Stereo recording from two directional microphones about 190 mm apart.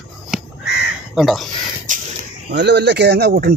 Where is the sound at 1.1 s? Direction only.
Centre (ahead or behind).